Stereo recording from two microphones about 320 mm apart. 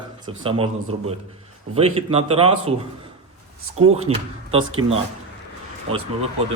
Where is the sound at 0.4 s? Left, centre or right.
Centre.